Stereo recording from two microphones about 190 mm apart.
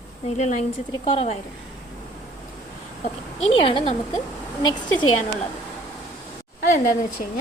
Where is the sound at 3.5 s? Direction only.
25° left (ahead or behind).